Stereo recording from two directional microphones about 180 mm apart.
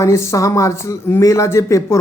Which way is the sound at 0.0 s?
15° left (ahead or behind).